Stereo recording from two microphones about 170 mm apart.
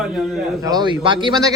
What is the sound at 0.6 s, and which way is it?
Speech, 20° right (ahead or behind).